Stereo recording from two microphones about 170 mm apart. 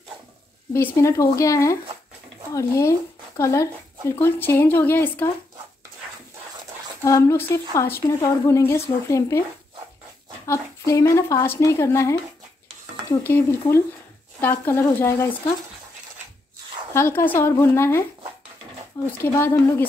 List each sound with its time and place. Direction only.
0.7 s a woman's voice: 15° left (ahead or behind)
7.1 s a woman's voice: 15° left (ahead or behind)
10.4 s a woman's voice: 20° left (ahead or behind)
13.2 s a woman's voice: 15° left (ahead or behind)
16.9 s a woman's voice: 15° left (ahead or behind)
19.2 s a woman's voice: 15° left (ahead or behind)